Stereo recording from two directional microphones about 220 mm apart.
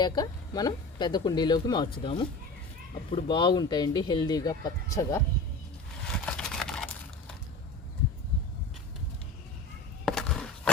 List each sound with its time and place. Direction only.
0.0 s speech: 20° left (ahead or behind)
6.1 s crumpling: 5° left (ahead or behind)
10.1 s skateboard: 5° left (ahead or behind)